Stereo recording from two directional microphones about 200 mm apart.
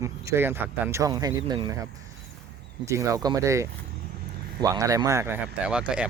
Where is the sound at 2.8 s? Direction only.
15° right (ahead or behind).